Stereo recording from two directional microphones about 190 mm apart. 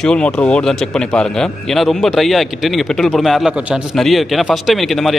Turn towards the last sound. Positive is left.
turn(degrees=0)  # may be behind; listen again after turning